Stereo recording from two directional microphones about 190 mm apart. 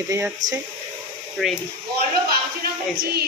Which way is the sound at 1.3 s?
Centre (ahead or behind).